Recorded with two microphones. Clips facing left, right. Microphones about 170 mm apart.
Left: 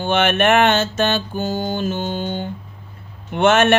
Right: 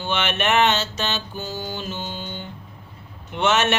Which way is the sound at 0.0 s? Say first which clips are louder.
Left 7 dB; 50° left (ahead or behind).